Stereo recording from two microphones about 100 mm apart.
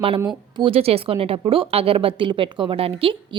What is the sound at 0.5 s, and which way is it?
Speech, 60° right (ahead or behind).